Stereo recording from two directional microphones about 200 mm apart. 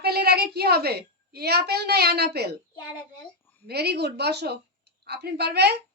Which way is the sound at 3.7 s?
55° right (ahead or behind).